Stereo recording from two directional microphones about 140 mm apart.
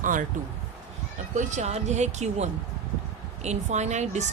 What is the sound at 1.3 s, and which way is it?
Speech, 60° right (ahead or behind).